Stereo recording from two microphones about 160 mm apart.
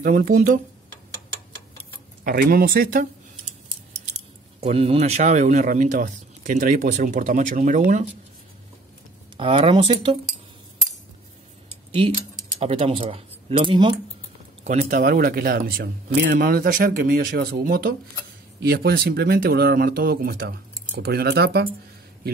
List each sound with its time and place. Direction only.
0.0 s speech: 55° right (ahead or behind)
2.2 s speech: 65° right (ahead or behind)
4.1 s speech: 45° right (ahead or behind)
9.4 s speech: 35° right (ahead or behind)
12.5 s speech: 35° right (ahead or behind)
14.6 s speech: 50° right (ahead or behind); by 17.9 s 70° right (ahead or behind)
18.6 s speech: 80° right